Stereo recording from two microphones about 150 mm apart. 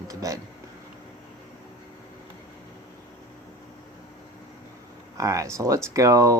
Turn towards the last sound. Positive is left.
turn(degrees=-20)  # may be behind; listen again after turning